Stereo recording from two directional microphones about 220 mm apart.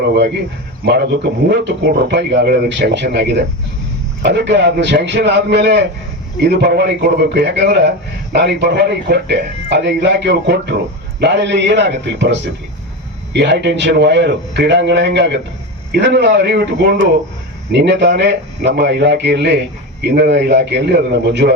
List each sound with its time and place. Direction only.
0.9 s speech: 50° right (ahead or behind)